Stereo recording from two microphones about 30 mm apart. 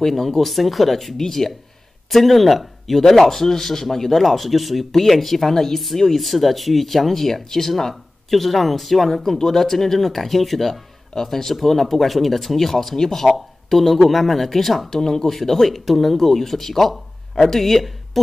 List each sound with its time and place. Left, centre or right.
0.0 s speech: centre